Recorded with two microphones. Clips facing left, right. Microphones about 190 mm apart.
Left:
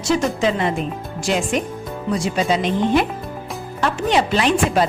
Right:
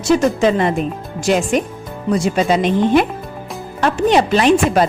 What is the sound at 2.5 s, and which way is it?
Speech, 55° right (ahead or behind).